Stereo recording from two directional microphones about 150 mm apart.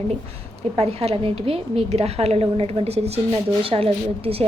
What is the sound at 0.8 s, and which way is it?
A woman's voice, 40° right (ahead or behind).